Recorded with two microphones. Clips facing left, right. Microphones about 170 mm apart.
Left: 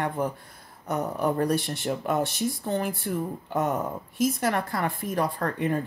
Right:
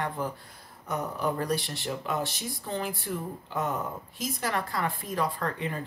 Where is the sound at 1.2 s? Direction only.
55° left (ahead or behind).